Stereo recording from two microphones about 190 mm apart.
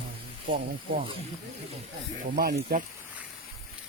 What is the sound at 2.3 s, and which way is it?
Speech, 50° right (ahead or behind).